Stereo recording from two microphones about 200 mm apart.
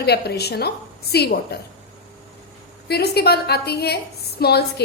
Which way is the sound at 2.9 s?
55° left (ahead or behind).